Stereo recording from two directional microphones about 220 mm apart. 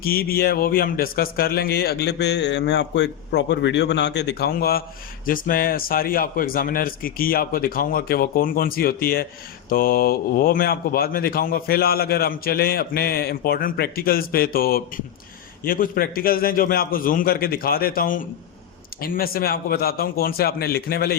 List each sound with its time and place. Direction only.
0.0 s a man's voice: 40° left (ahead or behind)